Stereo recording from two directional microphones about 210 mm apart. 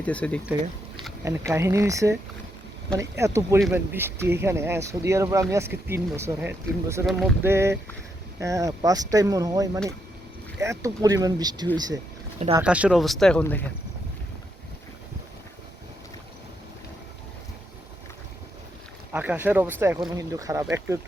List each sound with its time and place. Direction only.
0.0 s speech: 5° left (ahead or behind)
1.2 s speech: 15° right (ahead or behind)
7.1 s speech: centre (ahead or behind)
7.4 s speech: 10° right (ahead or behind)
12.5 s speech: 5° right (ahead or behind)
19.1 s speech: 10° right (ahead or behind)